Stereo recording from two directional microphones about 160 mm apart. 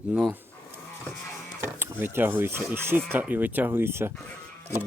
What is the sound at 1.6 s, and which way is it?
Speech, 15° right (ahead or behind).